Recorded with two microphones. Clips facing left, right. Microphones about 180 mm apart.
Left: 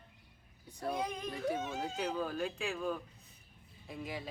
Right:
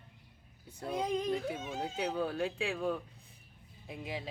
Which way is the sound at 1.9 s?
30° right (ahead or behind).